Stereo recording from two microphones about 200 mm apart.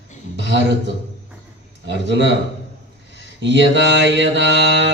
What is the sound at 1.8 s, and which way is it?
Mantra, 60° right (ahead or behind).